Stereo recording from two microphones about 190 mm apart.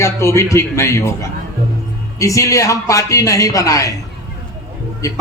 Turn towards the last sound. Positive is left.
turn(degrees=15)  # may be behind; listen again after turning